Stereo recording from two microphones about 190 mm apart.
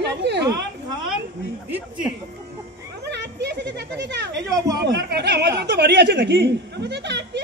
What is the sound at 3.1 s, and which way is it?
Children playing, 65° right (ahead or behind).